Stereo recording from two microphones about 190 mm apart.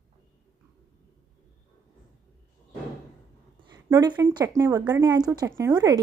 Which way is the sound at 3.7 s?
20° right (ahead or behind).